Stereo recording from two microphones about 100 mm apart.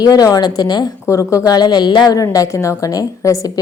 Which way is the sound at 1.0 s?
30° left (ahead or behind).